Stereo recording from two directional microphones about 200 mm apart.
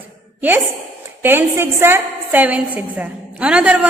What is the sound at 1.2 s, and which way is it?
A woman's voice, 10° right (ahead or behind).